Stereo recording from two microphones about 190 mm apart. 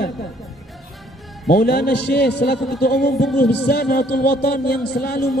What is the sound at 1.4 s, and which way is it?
A man's voice, 55° left (ahead or behind).